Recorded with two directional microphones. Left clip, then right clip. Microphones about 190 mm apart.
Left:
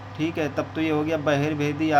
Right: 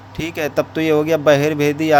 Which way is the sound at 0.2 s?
40° right (ahead or behind).